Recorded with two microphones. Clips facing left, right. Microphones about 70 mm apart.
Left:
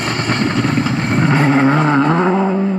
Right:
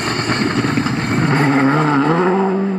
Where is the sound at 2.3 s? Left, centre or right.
Centre.